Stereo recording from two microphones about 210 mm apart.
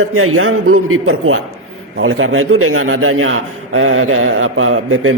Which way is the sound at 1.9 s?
65° right (ahead or behind).